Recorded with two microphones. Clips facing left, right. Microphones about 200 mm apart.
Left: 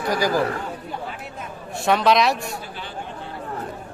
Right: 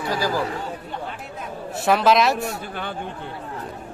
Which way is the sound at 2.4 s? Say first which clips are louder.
Right 4 dB; 60° right (ahead or behind).